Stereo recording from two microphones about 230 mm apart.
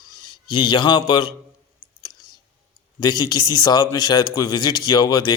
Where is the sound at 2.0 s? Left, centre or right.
Centre.